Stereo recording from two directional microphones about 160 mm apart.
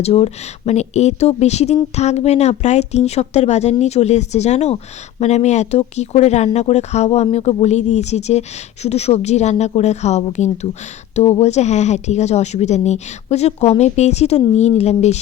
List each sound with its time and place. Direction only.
0.0 s speech: 40° left (ahead or behind)